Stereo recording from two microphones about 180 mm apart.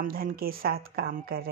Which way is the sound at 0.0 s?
55° right (ahead or behind).